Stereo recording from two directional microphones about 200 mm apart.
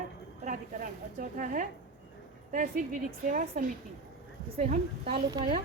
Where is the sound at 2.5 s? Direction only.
40° right (ahead or behind).